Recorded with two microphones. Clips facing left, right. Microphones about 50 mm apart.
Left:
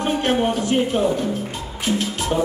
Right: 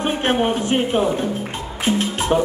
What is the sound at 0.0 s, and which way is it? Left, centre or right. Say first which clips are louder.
Speech: right 1 dB; right.